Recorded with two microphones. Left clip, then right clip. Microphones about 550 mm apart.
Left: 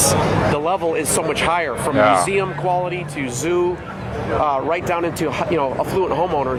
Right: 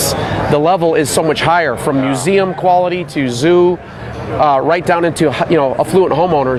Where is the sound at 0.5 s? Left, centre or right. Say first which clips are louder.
Right 8 dB; right.